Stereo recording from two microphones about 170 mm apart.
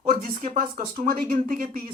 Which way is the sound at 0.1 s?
55° right (ahead or behind).